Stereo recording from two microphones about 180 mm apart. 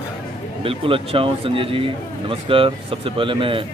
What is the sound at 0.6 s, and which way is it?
Speech, 30° right (ahead or behind).